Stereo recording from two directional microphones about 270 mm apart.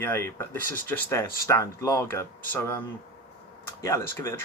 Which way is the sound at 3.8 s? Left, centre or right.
Centre.